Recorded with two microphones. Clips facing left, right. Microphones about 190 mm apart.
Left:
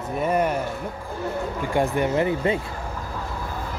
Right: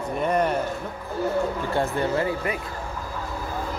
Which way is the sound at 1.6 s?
15° left (ahead or behind).